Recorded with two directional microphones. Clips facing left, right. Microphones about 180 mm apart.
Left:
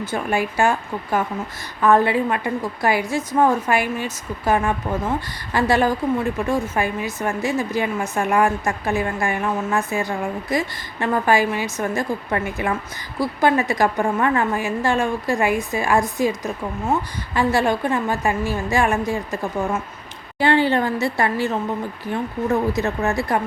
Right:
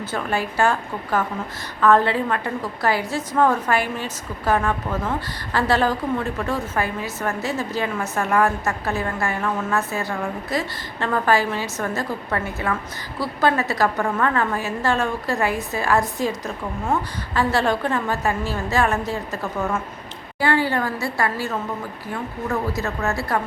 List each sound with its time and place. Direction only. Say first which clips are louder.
0.1 s a woman's voice: left 2 dB; 10° left (ahead or behind)
20.4 s a woman's voice: left 3 dB; 20° left (ahead or behind)